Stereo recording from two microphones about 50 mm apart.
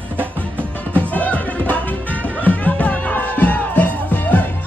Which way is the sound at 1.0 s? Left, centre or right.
Left.